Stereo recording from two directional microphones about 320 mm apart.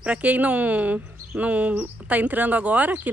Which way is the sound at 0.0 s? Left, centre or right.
Centre.